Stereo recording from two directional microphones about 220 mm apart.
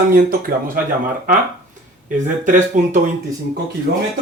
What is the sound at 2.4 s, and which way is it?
Speech, 35° right (ahead or behind).